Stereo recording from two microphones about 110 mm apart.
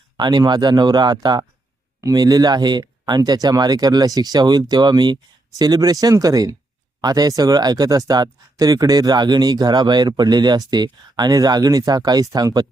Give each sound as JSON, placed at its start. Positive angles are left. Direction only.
{"t": 0.2, "sound": "speech", "side_deg": -40}